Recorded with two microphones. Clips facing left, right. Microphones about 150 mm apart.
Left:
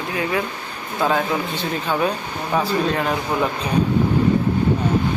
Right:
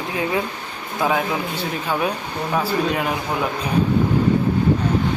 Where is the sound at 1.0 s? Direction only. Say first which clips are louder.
Left 1 dB; 10° right (ahead or behind).